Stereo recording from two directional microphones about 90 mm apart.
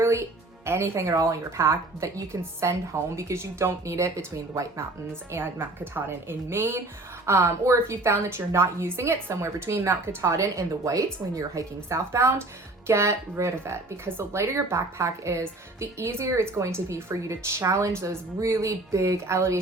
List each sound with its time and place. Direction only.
0.0 s a woman's voice: 30° right (ahead or behind)